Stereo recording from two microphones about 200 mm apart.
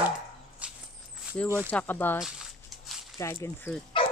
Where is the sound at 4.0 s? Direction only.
25° left (ahead or behind).